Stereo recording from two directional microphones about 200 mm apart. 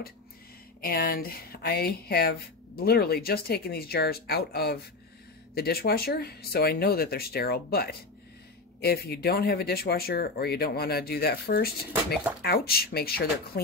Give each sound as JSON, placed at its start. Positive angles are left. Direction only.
{"t": 0.7, "sound": "speech", "side_deg": 50}